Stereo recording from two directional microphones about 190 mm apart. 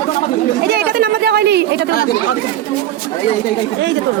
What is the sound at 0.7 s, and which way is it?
Speech, 55° right (ahead or behind).